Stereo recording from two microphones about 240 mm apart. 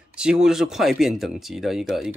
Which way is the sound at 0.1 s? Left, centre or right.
Centre.